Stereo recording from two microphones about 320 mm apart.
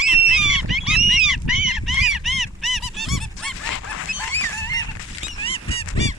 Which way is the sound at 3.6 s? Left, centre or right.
Left.